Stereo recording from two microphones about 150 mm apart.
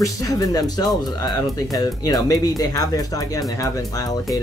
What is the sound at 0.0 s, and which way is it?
Speech, 20° left (ahead or behind).